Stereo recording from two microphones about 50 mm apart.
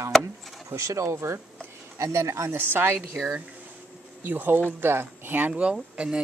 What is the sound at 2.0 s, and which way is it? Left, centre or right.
Speech, right.